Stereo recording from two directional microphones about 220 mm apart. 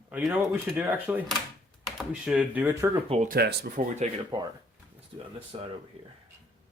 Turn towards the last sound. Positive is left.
turn(degrees=-30)  # may be behind; listen again after turning